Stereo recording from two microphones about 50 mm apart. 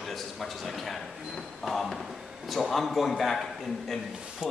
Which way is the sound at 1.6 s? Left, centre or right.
Centre.